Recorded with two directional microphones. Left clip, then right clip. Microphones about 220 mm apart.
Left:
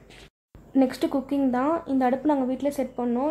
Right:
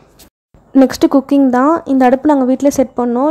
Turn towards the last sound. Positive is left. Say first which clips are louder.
# right 13 dB
turn(degrees=-35)  # may be behind; listen again after turning